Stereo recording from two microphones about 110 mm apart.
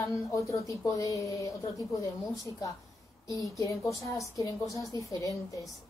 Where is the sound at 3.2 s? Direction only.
30° left (ahead or behind).